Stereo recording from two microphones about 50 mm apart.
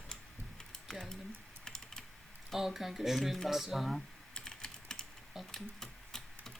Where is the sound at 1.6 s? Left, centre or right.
Centre.